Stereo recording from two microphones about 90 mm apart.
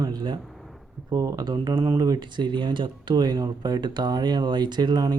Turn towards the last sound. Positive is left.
turn(degrees=-50)  # may be behind; listen again after turning